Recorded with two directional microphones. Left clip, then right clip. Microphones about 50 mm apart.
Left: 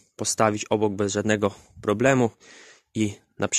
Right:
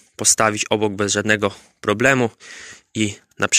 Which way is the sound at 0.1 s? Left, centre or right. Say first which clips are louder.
Right 5 dB; centre.